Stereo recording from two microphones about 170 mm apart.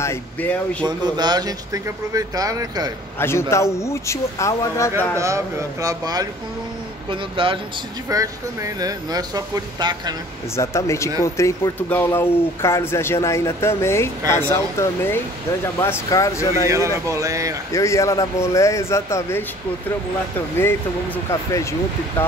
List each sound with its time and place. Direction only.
0.0 s speech: 15° left (ahead or behind)
0.8 s speech: 25° right (ahead or behind)
3.2 s speech: 15° left (ahead or behind)
5.1 s speech: 15° right (ahead or behind)
8.1 s speech: 20° right (ahead or behind)
10.5 s speech: 15° left (ahead or behind)
16.6 s speech: 20° right (ahead or behind)
17.7 s speech: 15° left (ahead or behind)